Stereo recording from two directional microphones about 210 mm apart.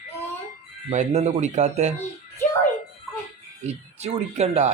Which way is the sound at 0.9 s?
30° right (ahead or behind).